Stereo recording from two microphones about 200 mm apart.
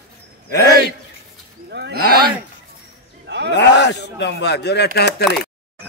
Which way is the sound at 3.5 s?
60° left (ahead or behind).